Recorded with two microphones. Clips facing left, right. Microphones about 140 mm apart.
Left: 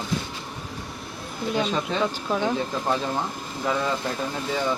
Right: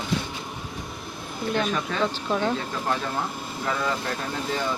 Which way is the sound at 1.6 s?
20° left (ahead or behind).